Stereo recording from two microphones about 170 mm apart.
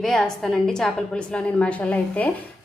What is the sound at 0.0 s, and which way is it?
A woman's voice, 5° left (ahead or behind).